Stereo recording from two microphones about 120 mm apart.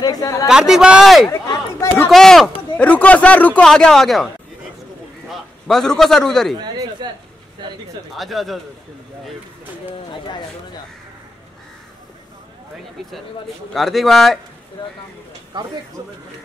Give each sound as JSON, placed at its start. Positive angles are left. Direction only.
{"t": 0.0, "sound": "a man's voice", "side_deg": 30}
{"t": 0.5, "sound": "a man's voice", "side_deg": -5}
{"t": 5.3, "sound": "a man's voice", "side_deg": 5}
{"t": 6.6, "sound": "a sound", "side_deg": -35}
{"t": 8.1, "sound": "a man's voice", "side_deg": 0}
{"t": 13.7, "sound": "a man's voice", "side_deg": 0}
{"t": 15.5, "sound": "speech", "side_deg": -40}